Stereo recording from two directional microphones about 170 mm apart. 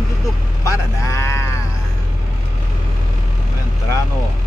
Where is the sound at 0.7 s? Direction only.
15° left (ahead or behind).